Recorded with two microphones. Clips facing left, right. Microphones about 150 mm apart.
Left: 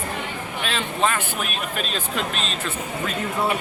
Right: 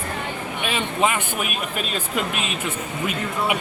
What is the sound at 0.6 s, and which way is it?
Speech, 10° right (ahead or behind).